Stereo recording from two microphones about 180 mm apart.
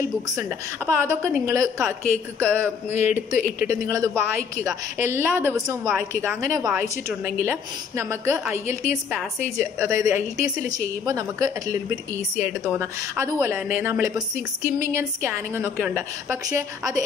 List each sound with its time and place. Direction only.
0.4 s a woman's voice: 15° right (ahead or behind)
2.9 s speech: 40° left (ahead or behind)
3.2 s a woman's voice: 15° right (ahead or behind)